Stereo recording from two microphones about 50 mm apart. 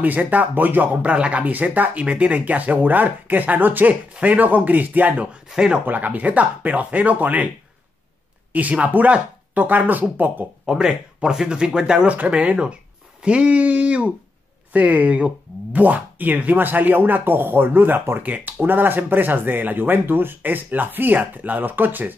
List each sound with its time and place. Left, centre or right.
0.0 s speech: right
1.1 s speech: right
8.5 s speech: right
10.7 s speech: centre; by 18.2 s right
18.2 s speech: right